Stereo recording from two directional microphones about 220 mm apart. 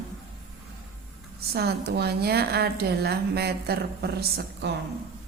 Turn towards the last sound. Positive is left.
turn(degrees=-45)  # may be behind; listen again after turning